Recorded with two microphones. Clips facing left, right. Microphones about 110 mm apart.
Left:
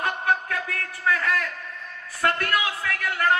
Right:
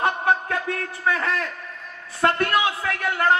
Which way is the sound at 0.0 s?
25° right (ahead or behind).